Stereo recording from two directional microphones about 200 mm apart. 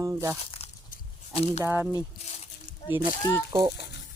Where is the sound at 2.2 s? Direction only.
35° left (ahead or behind).